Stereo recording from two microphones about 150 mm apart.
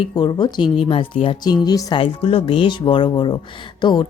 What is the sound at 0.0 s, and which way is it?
Speech, 30° left (ahead or behind).